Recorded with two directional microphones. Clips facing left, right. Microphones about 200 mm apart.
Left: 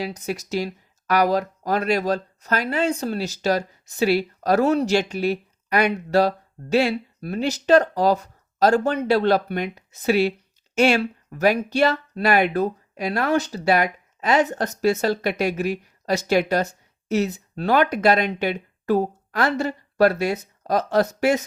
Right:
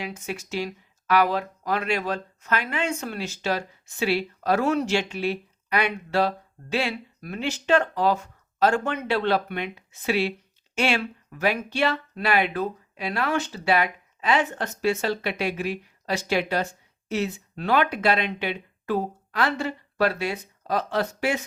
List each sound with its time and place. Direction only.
0.0 s speech: 40° left (ahead or behind)